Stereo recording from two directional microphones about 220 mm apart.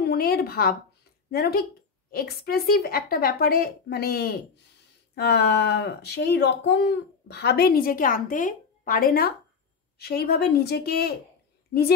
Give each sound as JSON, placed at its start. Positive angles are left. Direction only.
{"t": 0.0, "sound": "a woman's voice", "side_deg": 45}